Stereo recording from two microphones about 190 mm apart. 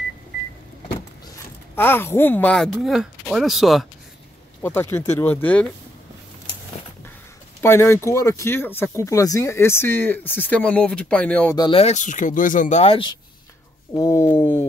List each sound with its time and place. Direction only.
1.8 s speech: 10° left (ahead or behind)
4.6 s speech: 10° left (ahead or behind)
7.6 s speech: 15° left (ahead or behind)
11.5 s speech: 25° left (ahead or behind)
13.9 s speech: 15° left (ahead or behind)